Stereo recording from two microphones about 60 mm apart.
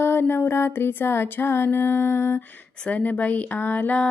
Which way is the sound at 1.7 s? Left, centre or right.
Left.